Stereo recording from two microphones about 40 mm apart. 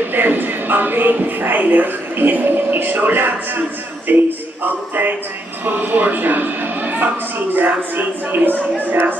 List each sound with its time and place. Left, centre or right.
0.1 s speech: right
5.7 s speech: right
7.5 s speech: right